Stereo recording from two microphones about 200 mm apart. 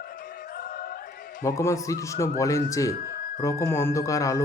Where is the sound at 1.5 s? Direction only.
15° left (ahead or behind).